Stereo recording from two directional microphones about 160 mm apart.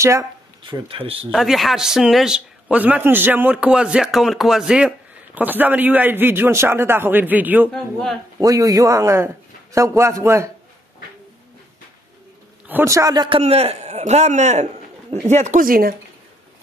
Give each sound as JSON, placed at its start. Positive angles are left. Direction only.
{"t": 0.0, "sound": "a man's voice", "side_deg": -20}
{"t": 0.6, "sound": "speech", "side_deg": -35}
{"t": 1.3, "sound": "a man's voice", "side_deg": 0}
{"t": 7.7, "sound": "speech", "side_deg": 0}
{"t": 8.4, "sound": "a man's voice", "side_deg": -20}
{"t": 12.6, "sound": "a man's voice", "side_deg": -15}
{"t": 13.4, "sound": "a man's voice", "side_deg": -40}